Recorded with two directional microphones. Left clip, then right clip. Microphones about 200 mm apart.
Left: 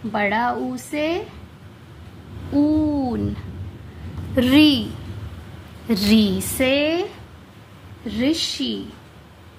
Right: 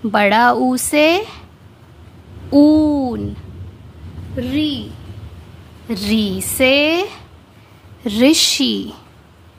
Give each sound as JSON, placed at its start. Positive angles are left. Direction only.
{"t": 0.1, "sound": "speech", "side_deg": -45}
{"t": 2.5, "sound": "speech", "side_deg": -45}
{"t": 4.4, "sound": "a woman's voice", "side_deg": 35}
{"t": 5.9, "sound": "a woman's voice", "side_deg": 0}
{"t": 6.5, "sound": "a woman's voice", "side_deg": -25}
{"t": 8.0, "sound": "speech", "side_deg": -45}